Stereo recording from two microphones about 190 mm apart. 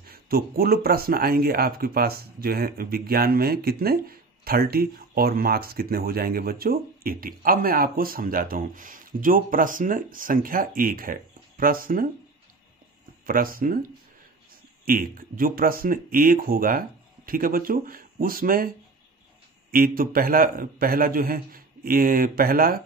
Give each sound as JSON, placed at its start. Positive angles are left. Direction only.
{"t": 0.1, "sound": "speech", "side_deg": -55}
{"t": 13.2, "sound": "speech", "side_deg": -50}
{"t": 19.7, "sound": "speech", "side_deg": -50}